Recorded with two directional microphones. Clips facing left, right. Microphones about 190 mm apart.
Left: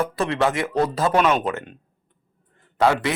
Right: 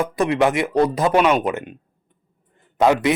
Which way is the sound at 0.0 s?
15° right (ahead or behind).